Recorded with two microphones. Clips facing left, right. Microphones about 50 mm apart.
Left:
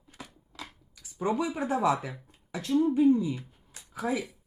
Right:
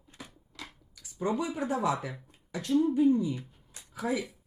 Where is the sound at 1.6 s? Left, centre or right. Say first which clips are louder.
Left 3 dB; left.